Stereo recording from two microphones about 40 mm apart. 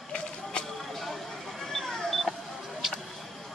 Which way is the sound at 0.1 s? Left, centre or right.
Left.